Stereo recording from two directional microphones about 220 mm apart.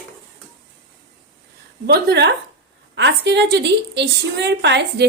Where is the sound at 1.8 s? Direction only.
45° right (ahead or behind).